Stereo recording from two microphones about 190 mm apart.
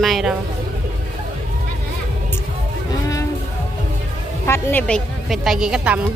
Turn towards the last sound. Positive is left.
turn(degrees=-5)  # may be behind; listen again after turning